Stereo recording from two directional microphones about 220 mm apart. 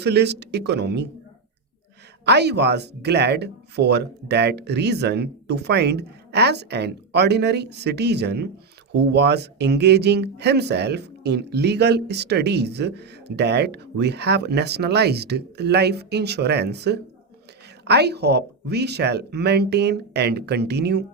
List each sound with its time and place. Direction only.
0.0 s speech: 50° right (ahead or behind)
2.2 s speech: 50° right (ahead or behind)